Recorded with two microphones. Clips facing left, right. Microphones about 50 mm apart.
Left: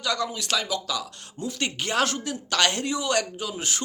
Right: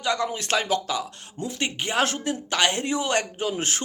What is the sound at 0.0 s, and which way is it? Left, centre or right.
Speech, right.